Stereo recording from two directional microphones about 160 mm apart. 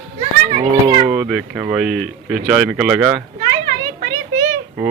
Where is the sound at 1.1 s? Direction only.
5° right (ahead or behind).